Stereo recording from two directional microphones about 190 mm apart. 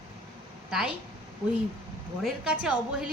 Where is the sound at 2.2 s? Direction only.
5° right (ahead or behind).